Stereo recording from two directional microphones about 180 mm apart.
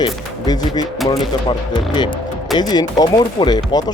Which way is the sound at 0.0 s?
20° left (ahead or behind).